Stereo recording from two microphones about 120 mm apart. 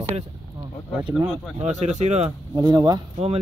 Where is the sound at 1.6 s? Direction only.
70° right (ahead or behind).